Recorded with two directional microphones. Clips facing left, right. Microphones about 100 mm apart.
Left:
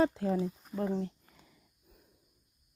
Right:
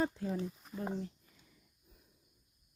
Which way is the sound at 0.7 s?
Centre (ahead or behind).